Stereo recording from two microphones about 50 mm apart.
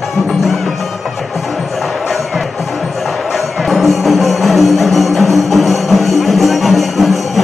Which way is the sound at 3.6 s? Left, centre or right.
Centre.